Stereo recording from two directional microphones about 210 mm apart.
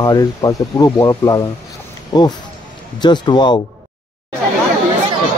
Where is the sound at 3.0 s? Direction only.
20° left (ahead or behind).